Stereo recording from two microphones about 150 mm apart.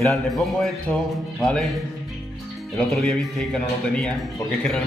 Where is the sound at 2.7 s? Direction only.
5° left (ahead or behind).